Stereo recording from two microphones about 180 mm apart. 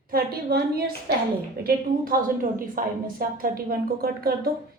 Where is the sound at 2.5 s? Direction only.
50° right (ahead or behind).